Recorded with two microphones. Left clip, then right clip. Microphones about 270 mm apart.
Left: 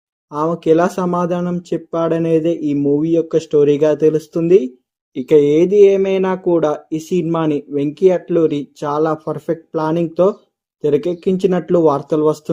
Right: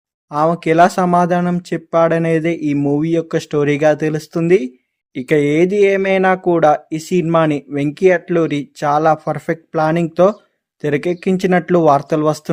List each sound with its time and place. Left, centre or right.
0.3 s speech: right